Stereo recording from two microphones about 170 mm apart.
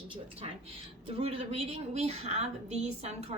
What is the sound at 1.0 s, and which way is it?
A woman's voice, 35° right (ahead or behind).